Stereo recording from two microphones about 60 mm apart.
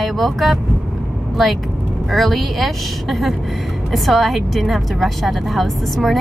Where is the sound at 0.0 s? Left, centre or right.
Centre.